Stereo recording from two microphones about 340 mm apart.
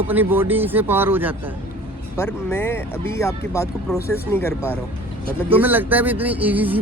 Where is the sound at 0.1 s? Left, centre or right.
Centre.